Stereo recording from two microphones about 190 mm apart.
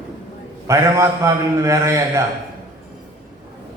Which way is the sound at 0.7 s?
15° right (ahead or behind).